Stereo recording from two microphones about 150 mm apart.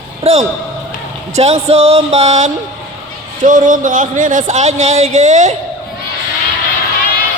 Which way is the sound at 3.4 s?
60° right (ahead or behind).